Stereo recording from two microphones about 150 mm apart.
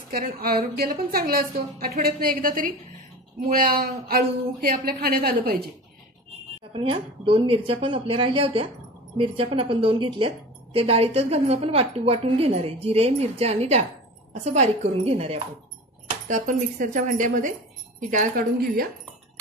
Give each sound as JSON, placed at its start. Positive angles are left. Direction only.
{"t": 0.1, "sound": "a woman's voice", "side_deg": -85}
{"t": 4.2, "sound": "a woman's voice", "side_deg": -65}
{"t": 6.7, "sound": "a woman's voice", "side_deg": -35}
{"t": 16.3, "sound": "speech", "side_deg": -60}
{"t": 18.1, "sound": "speech", "side_deg": -70}